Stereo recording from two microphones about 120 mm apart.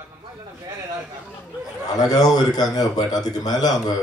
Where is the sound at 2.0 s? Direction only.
30° left (ahead or behind).